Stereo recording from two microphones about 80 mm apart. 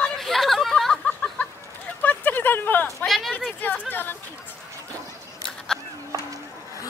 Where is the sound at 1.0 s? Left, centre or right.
Centre.